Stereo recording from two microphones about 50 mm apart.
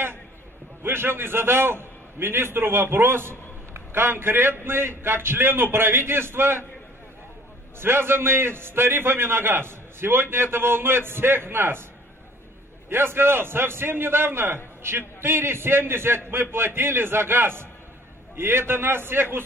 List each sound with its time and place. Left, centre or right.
0.8 s a man's voice: right
7.8 s a man's voice: right
12.9 s a man's voice: right